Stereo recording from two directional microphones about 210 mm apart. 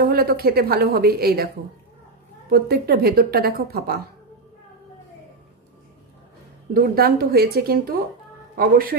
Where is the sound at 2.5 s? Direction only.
50° right (ahead or behind).